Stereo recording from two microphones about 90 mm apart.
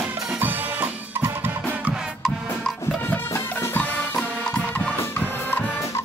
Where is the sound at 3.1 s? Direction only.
30° left (ahead or behind).